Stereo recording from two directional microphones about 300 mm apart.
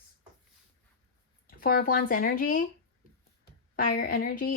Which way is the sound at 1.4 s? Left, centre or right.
Left.